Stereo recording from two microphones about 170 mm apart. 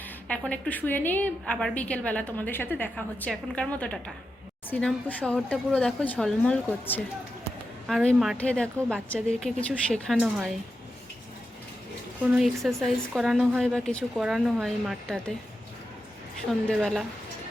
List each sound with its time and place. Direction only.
0.3 s a woman's voice: 5° left (ahead or behind)
7.9 s a woman's voice: centre (ahead or behind)
12.2 s a woman's voice: 5° right (ahead or behind)
16.6 s a woman's voice: 5° left (ahead or behind)